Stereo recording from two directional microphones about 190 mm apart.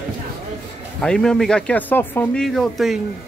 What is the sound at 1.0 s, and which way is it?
Speech, 5° left (ahead or behind).